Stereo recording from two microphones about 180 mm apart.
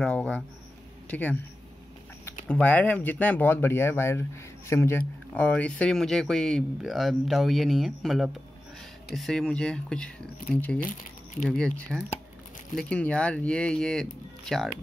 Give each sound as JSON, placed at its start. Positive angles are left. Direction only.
{"t": 0.0, "sound": "speech", "side_deg": 5}
{"t": 2.4, "sound": "speech", "side_deg": 10}
{"t": 10.8, "sound": "speech", "side_deg": 45}
{"t": 11.4, "sound": "speech", "side_deg": 5}